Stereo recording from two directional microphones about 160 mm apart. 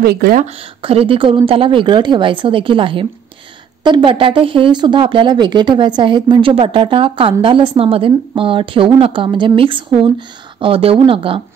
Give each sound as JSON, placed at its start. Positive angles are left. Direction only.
{"t": 0.0, "sound": "speech", "side_deg": -70}
{"t": 0.8, "sound": "speech", "side_deg": -35}